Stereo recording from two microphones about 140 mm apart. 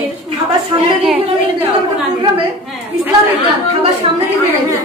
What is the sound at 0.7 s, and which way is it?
Speech, 35° right (ahead or behind).